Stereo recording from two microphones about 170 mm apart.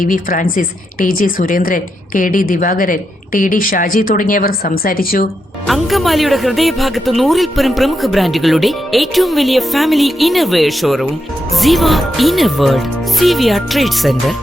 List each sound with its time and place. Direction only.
0.0 s a woman's voice: 50° left (ahead or behind)
5.6 s speech: centre (ahead or behind)